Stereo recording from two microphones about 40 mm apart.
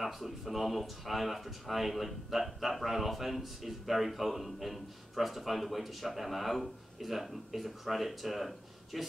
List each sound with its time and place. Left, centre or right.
0.0 s speech: centre